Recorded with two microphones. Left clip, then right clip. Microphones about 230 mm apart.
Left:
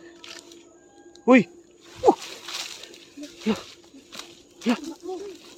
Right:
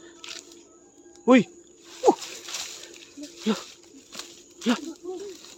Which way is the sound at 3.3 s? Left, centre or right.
Centre.